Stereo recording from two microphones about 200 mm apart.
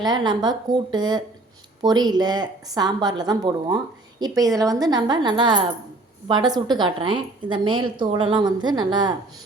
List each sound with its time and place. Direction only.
0.0 s speech: 20° right (ahead or behind)